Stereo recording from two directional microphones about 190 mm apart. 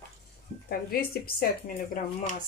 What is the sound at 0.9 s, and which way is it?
Speech, 50° left (ahead or behind).